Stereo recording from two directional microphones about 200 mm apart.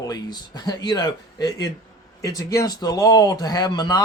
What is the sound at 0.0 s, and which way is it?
Speech, 20° left (ahead or behind).